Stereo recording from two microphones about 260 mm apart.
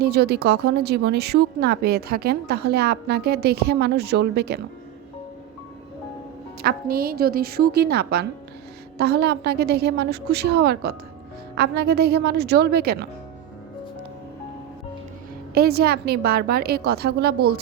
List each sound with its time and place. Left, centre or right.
0.0 s speech: right
6.6 s speech: right
15.5 s speech: right